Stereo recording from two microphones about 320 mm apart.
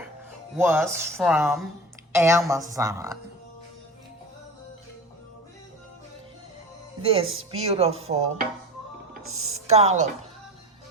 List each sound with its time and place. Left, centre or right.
0.5 s a woman's voice: centre
7.0 s a woman's voice: centre
9.2 s speech: right
9.5 s speech: right